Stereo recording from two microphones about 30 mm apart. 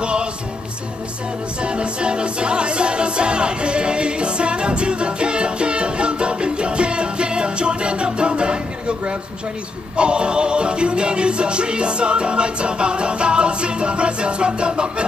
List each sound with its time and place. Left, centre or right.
0.0 s music: right
1.6 s music: right